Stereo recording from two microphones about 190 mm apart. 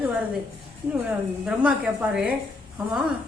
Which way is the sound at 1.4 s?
5° right (ahead or behind).